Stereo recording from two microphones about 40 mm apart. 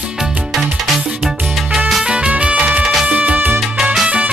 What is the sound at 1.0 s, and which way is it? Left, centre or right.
Music, right.